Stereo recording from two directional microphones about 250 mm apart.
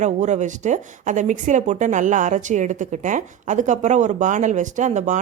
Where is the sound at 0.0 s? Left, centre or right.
Right.